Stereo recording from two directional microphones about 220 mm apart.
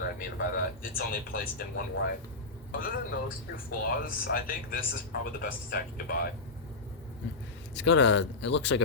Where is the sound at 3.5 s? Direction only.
40° left (ahead or behind).